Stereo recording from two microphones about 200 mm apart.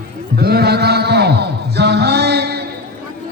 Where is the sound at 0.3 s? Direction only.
50° right (ahead or behind).